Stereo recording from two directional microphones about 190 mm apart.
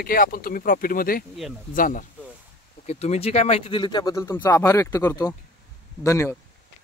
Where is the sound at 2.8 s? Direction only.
35° left (ahead or behind); by 6.3 s 15° left (ahead or behind).